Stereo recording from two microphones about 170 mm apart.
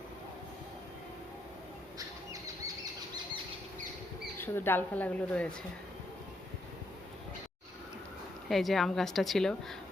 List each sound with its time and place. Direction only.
4.4 s speech: 15° left (ahead or behind)
8.4 s a woman's voice: centre (ahead or behind)